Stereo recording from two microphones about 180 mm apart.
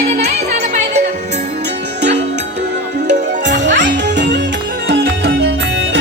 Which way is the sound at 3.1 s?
45° right (ahead or behind).